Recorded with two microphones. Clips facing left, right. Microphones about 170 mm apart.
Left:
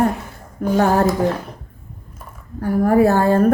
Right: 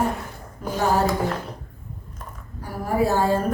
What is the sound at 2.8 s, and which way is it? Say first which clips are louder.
Speech: left 6 dB; 60° left (ahead or behind).